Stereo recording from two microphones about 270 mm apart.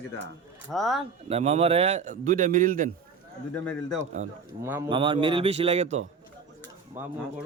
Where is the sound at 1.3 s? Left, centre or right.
Right.